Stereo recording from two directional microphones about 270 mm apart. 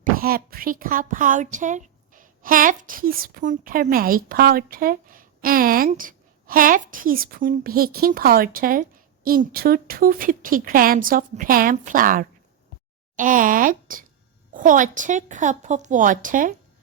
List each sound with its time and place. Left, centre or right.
0.0 s a woman's voice: right